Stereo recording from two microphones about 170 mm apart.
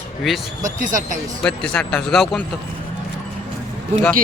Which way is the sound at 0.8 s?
50° right (ahead or behind).